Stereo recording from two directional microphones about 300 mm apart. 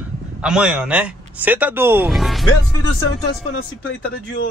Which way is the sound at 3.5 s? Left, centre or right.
Left.